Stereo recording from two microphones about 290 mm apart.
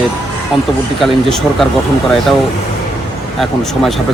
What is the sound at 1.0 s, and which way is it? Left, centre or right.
Speech, centre.